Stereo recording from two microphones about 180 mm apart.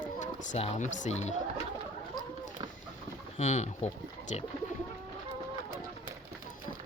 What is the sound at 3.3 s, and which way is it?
Speech, 40° left (ahead or behind).